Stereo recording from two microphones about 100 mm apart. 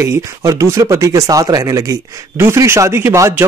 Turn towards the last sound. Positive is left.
turn(degrees=-25)  # may be behind; listen again after turning